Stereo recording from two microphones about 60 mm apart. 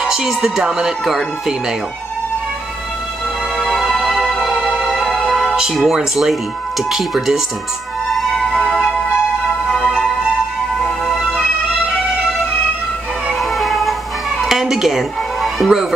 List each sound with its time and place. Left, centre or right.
0.0 s speech: centre
3.5 s music: centre
4.4 s music: centre
4.9 s music: centre
5.3 s speech: centre
8.2 s music: centre
8.5 s music: centre
9.7 s music: centre
11.1 s music: centre
13.3 s music: centre